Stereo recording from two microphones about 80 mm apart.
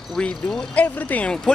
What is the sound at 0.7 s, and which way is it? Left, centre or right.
Speech, left.